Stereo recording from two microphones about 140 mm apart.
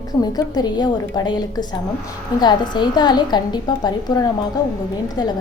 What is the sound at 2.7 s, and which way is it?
A woman's voice, 30° left (ahead or behind).